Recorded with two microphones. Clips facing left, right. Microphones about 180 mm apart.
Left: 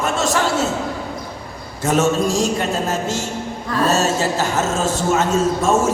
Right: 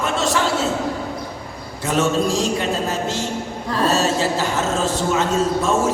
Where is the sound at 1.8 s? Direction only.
45° left (ahead or behind).